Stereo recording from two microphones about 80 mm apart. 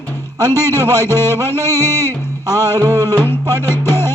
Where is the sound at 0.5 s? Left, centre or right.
Left.